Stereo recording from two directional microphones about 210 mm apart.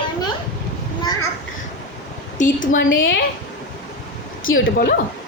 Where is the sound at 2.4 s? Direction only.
40° left (ahead or behind).